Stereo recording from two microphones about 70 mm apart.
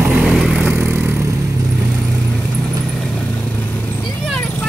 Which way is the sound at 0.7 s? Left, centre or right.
Right.